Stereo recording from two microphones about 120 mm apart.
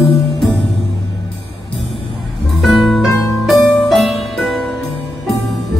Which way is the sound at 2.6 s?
Centre (ahead or behind).